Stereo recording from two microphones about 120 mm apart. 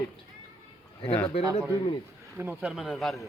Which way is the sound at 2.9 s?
Centre (ahead or behind).